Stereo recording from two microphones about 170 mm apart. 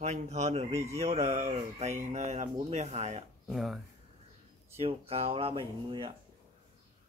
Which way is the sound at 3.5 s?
Centre (ahead or behind).